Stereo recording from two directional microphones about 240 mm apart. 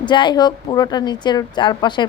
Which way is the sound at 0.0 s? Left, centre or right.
Centre.